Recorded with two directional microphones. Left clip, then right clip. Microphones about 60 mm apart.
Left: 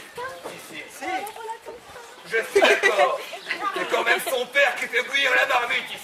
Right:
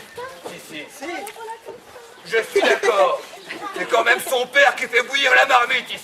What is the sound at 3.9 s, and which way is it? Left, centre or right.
Speech, right.